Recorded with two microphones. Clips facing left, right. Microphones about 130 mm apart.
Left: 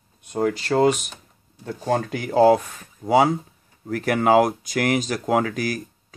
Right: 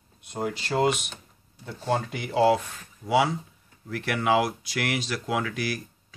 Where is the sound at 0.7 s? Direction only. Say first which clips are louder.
Left 4 dB; 40° left (ahead or behind).